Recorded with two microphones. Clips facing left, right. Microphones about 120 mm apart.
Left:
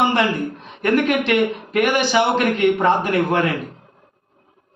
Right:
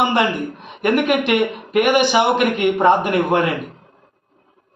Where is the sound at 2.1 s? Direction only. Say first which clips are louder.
Right 1 dB; 10° right (ahead or behind).